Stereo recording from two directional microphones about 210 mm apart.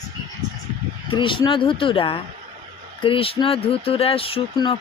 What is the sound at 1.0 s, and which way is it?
Speech, 25° left (ahead or behind).